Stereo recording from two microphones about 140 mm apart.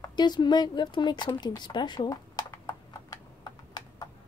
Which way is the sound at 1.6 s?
30° left (ahead or behind).